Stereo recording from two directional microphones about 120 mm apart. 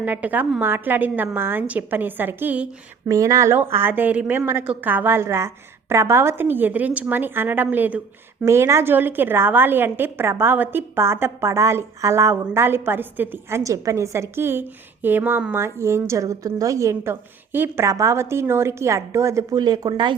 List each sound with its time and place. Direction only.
0.0 s a woman's voice: 15° right (ahead or behind)
3.1 s a woman's voice: 25° right (ahead or behind)
8.4 s a woman's voice: 25° right (ahead or behind); by 20.1 s 40° right (ahead or behind)